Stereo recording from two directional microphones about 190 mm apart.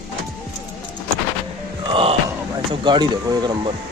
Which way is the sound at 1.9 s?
25° right (ahead or behind).